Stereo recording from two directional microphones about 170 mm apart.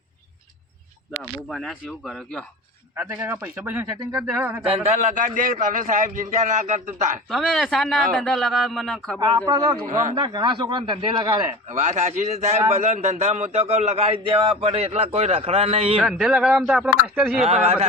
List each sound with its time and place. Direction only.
1.5 s speech: centre (ahead or behind)
2.9 s speech: 10° right (ahead or behind)
4.7 s a man's voice: 45° right (ahead or behind)
7.3 s speech: centre (ahead or behind)
10.2 s speech: 25° right (ahead or behind)
11.7 s a man's voice: 45° right (ahead or behind)
16.0 s speech: centre (ahead or behind)
17.4 s a man's voice: 40° right (ahead or behind)